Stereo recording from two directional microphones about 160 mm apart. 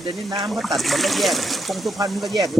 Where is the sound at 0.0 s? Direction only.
30° right (ahead or behind).